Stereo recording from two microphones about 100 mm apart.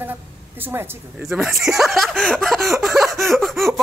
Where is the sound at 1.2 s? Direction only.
Centre (ahead or behind).